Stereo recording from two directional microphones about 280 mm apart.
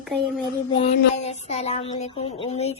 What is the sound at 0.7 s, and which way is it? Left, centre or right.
Speech, left.